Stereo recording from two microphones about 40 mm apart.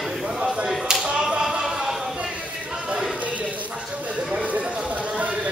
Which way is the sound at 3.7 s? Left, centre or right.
Right.